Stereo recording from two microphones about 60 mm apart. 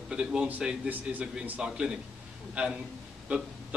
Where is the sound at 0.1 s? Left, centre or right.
Centre.